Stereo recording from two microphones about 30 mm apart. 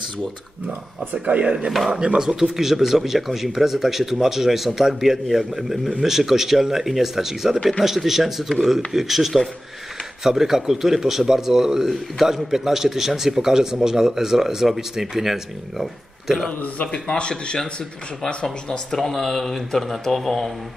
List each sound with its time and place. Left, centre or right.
1.1 s speech: right
1.7 s speech: centre
2.0 s a man's voice: right; by 16.4 s centre
16.8 s speech: left
18.9 s speech: centre